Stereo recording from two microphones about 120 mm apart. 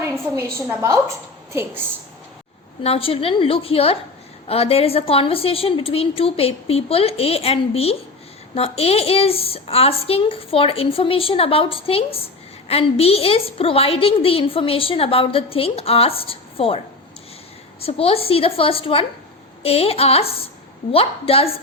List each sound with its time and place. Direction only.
0.0 s a woman's voice: 25° right (ahead or behind)
2.8 s a woman's voice: 55° left (ahead or behind)
17.8 s a woman's voice: 55° left (ahead or behind)